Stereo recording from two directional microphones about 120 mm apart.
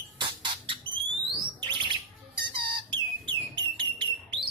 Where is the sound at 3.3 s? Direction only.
40° right (ahead or behind).